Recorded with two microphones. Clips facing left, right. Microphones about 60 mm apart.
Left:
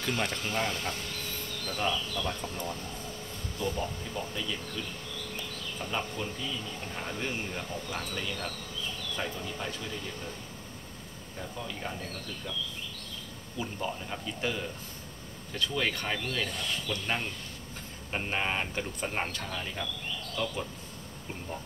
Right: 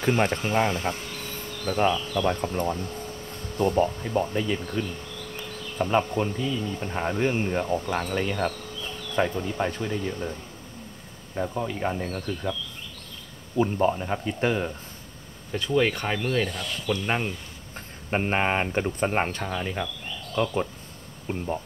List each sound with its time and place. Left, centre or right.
0.0 s speech: right
11.3 s speech: right
13.6 s speech: right
15.5 s speech: right
16.4 s speech: centre
18.1 s speech: right
21.3 s speech: right